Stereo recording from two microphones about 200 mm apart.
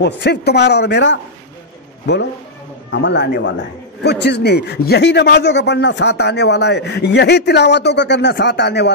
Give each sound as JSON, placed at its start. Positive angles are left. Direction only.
{"t": 0.0, "sound": "a man's voice", "side_deg": 55}
{"t": 2.9, "sound": "a man's voice", "side_deg": 60}